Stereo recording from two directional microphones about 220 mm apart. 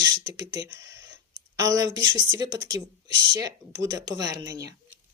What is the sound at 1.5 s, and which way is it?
Speech, 15° right (ahead or behind).